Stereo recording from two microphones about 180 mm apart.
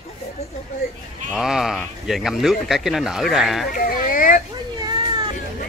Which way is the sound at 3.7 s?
50° left (ahead or behind).